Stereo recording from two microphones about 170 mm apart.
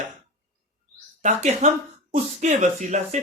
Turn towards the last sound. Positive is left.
turn(degrees=-45)  # may be behind; listen again after turning